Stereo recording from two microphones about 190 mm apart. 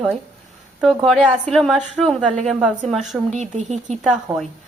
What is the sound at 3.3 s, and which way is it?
Speech, 35° right (ahead or behind).